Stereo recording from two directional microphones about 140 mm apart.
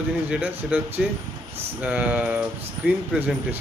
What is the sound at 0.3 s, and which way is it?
Speech, 10° right (ahead or behind).